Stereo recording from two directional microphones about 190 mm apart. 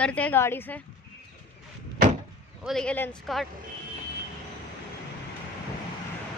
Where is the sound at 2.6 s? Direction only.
5° left (ahead or behind).